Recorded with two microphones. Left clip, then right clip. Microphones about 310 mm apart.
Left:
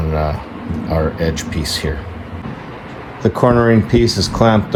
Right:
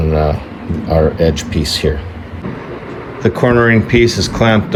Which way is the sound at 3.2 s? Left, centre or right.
Centre.